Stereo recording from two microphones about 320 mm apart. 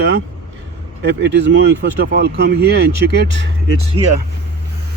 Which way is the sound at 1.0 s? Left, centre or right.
Right.